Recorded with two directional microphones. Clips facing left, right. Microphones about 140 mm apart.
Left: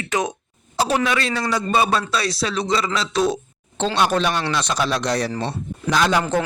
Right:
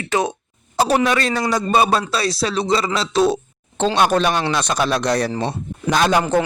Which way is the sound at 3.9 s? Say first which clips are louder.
Right 2 dB; 50° right (ahead or behind).